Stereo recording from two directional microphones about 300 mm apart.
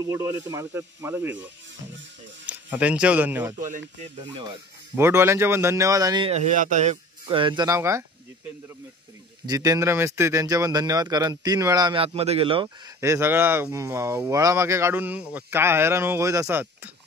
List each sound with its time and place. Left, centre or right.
0.5 s a man's voice: centre
3.5 s speech: right
4.9 s a man's voice: centre
9.5 s a man's voice: centre